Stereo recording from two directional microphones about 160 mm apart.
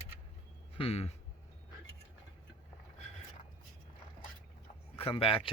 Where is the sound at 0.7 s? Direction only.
40° left (ahead or behind).